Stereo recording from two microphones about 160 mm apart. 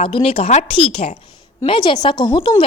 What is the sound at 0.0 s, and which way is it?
A woman's voice, 35° left (ahead or behind).